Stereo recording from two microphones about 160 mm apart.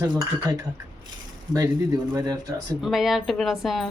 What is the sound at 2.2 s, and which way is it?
Cutlery, 25° right (ahead or behind).